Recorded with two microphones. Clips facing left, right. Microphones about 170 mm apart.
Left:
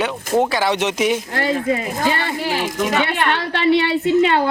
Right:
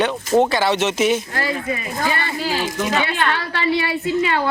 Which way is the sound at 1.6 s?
75° left (ahead or behind).